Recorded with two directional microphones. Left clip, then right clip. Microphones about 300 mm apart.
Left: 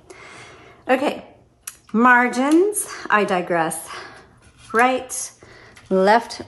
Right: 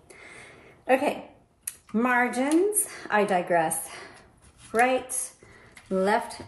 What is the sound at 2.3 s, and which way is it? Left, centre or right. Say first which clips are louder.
Speech: left 7 dB; centre.